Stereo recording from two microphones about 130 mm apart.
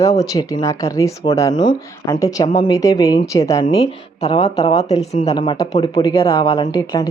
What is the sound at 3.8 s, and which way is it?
Speech, 55° left (ahead or behind).